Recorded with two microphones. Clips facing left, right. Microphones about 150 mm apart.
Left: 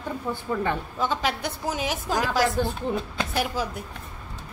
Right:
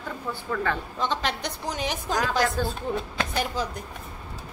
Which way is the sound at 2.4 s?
20° left (ahead or behind).